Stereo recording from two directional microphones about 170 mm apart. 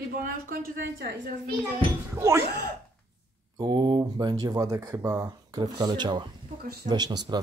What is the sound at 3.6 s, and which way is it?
Speech, 25° right (ahead or behind).